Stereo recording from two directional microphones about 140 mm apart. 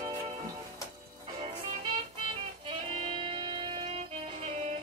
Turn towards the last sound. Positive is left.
turn(degrees=-35)  # may be behind; listen again after turning